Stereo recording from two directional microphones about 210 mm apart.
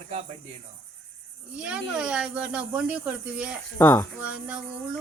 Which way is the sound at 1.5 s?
5° right (ahead or behind).